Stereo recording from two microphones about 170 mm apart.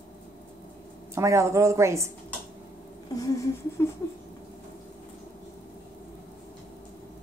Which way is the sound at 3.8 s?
15° left (ahead or behind).